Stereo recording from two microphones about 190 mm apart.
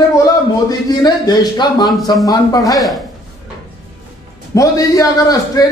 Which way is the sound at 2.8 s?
Centre (ahead or behind).